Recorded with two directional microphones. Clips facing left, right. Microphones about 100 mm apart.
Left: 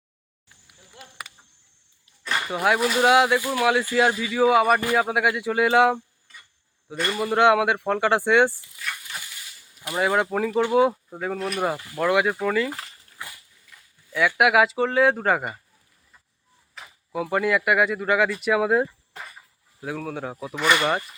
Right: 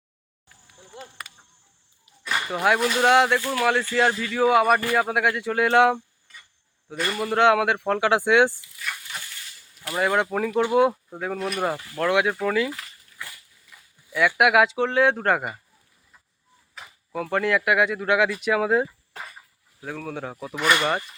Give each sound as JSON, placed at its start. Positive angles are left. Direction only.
{"t": 0.9, "sound": "insect", "side_deg": -25}
{"t": 2.2, "sound": "speech", "side_deg": 0}
{"t": 9.3, "sound": "snake", "side_deg": 10}
{"t": 10.7, "sound": "speech", "side_deg": 0}
{"t": 16.7, "sound": "speech", "side_deg": 0}